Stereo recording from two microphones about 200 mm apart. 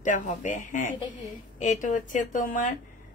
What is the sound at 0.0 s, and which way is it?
A woman's voice, 40° left (ahead or behind).